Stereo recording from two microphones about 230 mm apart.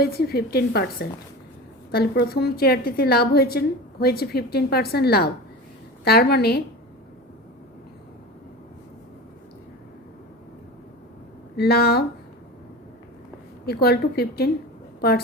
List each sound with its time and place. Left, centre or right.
0.0 s a woman's voice: left
11.5 s a woman's voice: left
13.7 s a woman's voice: left